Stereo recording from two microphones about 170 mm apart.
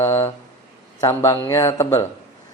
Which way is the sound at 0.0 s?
15° left (ahead or behind).